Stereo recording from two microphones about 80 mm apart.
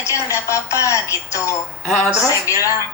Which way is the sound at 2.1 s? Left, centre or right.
Left.